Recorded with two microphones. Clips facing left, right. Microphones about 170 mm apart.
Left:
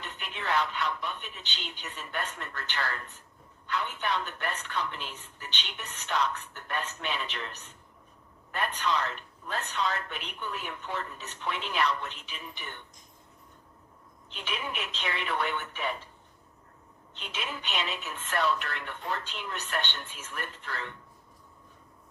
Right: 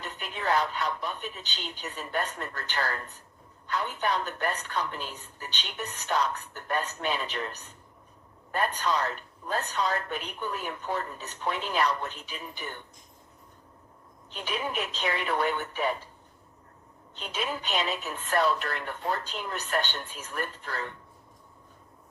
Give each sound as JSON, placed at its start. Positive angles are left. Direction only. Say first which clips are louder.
{"t": 0.0, "sound": "a woman's voice", "louder": "right 4 dB", "side_deg": -40}
{"t": 14.3, "sound": "a woman's voice", "louder": "right 4 dB", "side_deg": -40}
{"t": 17.2, "sound": "a woman's voice", "louder": "right 5 dB", "side_deg": -40}